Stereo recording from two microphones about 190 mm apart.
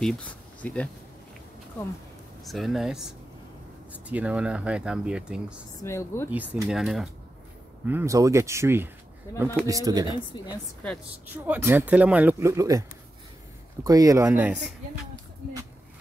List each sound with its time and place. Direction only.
0.0 s speech: 5° left (ahead or behind)
2.4 s speech: centre (ahead or behind)
5.8 s speech: 15° left (ahead or behind)
6.3 s speech: 10° right (ahead or behind)
7.8 s speech: 10° right (ahead or behind)
10.3 s a woman's voice: 20° left (ahead or behind)
11.2 s speech: 10° right (ahead or behind)
13.8 s speech: 20° right (ahead or behind)